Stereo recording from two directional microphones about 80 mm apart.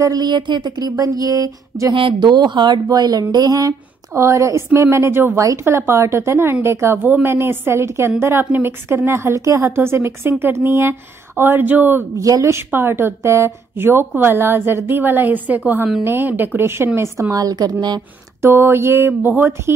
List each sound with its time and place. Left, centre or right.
0.0 s a sound: right
0.3 s a sound: right
2.0 s a woman's voice: right
12.2 s a woman's voice: right
17.4 s speech: right
18.4 s a woman's voice: right